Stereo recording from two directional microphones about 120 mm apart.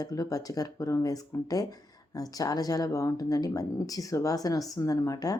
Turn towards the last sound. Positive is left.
turn(degrees=30)  # may be behind; listen again after turning